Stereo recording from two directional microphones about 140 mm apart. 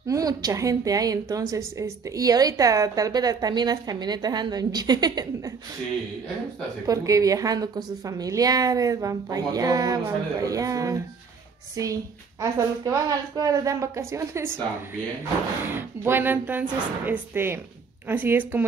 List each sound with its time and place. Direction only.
0.0 s a woman's voice: 25° right (ahead or behind)
6.9 s a woman's voice: 25° right (ahead or behind)
15.7 s speech: 15° right (ahead or behind)